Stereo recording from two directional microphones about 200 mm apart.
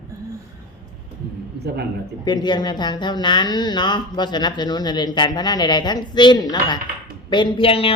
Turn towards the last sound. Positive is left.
turn(degrees=30)  # may be behind; listen again after turning